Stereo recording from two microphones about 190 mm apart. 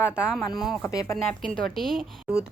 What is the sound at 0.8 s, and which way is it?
Speech, 15° left (ahead or behind).